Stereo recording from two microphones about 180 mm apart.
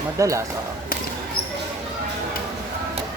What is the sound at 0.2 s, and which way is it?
Speech, 15° right (ahead or behind).